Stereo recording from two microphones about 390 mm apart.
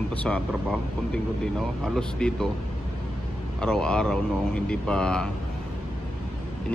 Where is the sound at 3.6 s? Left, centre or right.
Centre.